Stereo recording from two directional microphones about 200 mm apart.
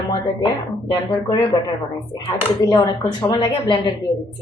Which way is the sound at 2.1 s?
20° left (ahead or behind).